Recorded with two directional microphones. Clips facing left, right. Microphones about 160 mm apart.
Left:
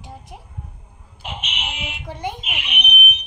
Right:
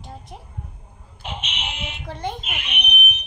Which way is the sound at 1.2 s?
5° left (ahead or behind).